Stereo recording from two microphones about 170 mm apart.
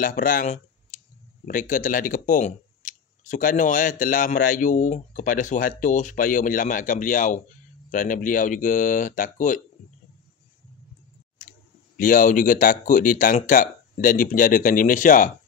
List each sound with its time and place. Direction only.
0.0 s speech: 55° left (ahead or behind)
12.0 s speech: 50° left (ahead or behind)